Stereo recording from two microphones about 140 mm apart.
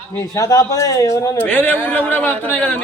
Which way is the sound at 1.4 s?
15° left (ahead or behind).